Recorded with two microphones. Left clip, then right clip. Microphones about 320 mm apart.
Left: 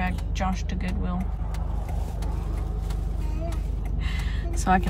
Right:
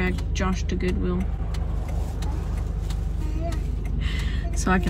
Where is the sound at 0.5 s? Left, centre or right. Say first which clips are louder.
Right 3 dB; centre.